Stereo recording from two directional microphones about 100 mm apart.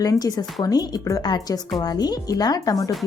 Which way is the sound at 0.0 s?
40° left (ahead or behind).